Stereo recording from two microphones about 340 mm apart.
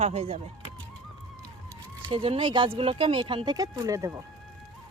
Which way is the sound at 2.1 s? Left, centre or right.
Centre.